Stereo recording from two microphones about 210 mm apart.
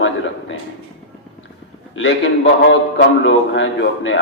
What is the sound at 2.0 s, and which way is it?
Speech, 60° left (ahead or behind).